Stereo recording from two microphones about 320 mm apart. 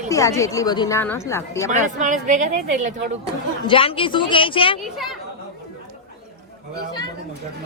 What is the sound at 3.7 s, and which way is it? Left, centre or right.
Speech, centre.